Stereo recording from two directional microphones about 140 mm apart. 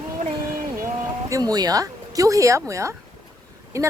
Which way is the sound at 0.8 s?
20° right (ahead or behind).